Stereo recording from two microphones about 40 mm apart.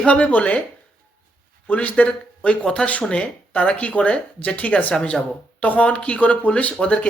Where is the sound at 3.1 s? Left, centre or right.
Left.